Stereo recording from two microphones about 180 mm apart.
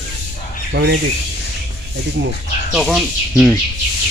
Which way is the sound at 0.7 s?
70° right (ahead or behind).